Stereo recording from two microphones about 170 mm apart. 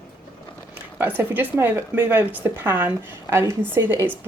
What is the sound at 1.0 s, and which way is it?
Speech, 10° right (ahead or behind).